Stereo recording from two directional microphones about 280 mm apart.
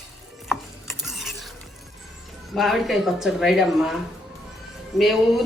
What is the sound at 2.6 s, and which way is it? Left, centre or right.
Speech, centre.